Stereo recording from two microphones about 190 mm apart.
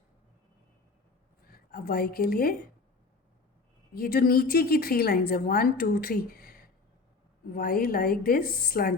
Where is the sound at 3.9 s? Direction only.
50° left (ahead or behind).